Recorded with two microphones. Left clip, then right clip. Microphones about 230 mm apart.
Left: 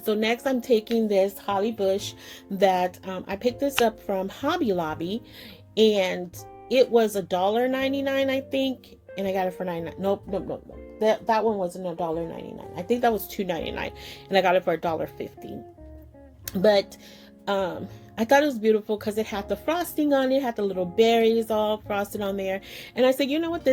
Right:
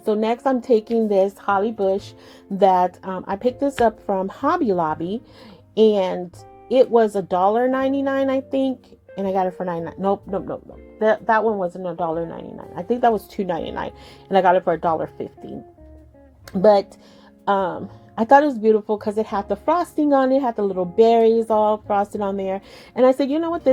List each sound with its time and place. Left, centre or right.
0.0 s a woman's voice: right
16.6 s a woman's voice: right